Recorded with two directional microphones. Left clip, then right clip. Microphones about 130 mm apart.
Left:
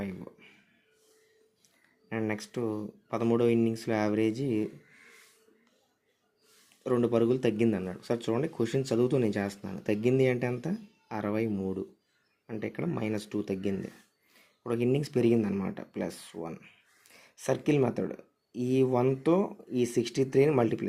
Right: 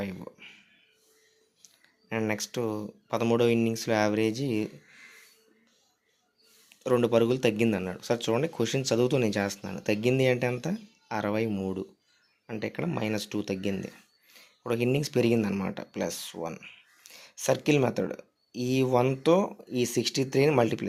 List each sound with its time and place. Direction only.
0.0 s a sound: 15° right (ahead or behind)
1.6 s speech: 20° right (ahead or behind)
6.8 s speech: 20° right (ahead or behind)